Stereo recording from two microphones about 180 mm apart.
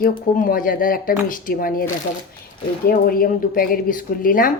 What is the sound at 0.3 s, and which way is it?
Speech, 50° left (ahead or behind).